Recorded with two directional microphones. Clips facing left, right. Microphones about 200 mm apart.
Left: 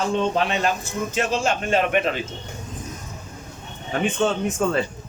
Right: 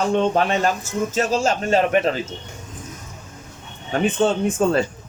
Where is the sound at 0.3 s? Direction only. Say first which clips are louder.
Right 3 dB; 45° right (ahead or behind).